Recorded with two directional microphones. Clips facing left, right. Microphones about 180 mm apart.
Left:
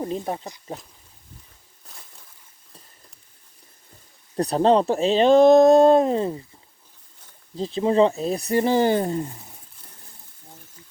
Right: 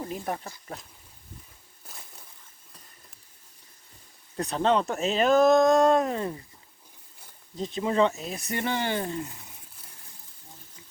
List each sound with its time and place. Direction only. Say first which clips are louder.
0.0 s speech: left 5 dB; 25° left (ahead or behind)
4.4 s speech: left 6 dB; 35° left (ahead or behind)
7.5 s speech: left 6 dB; 30° left (ahead or behind)